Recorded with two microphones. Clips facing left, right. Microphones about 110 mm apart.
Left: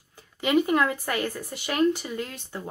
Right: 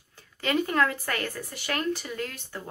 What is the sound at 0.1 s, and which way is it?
Speech, 15° left (ahead or behind).